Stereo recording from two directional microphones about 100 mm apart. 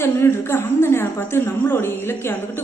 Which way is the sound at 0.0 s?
25° left (ahead or behind).